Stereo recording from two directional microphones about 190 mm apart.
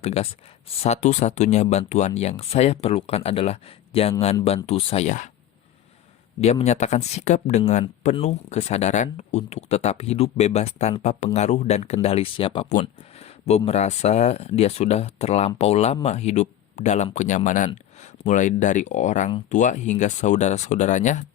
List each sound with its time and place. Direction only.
0.0 s speech: 35° left (ahead or behind)
6.4 s speech: 35° left (ahead or behind)